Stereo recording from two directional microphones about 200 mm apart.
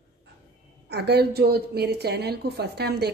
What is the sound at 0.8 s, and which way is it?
A woman's voice, 55° right (ahead or behind).